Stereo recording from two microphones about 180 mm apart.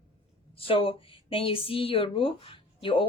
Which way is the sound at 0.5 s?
30° left (ahead or behind).